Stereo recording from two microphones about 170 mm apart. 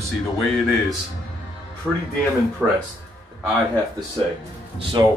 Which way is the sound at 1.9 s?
5° right (ahead or behind).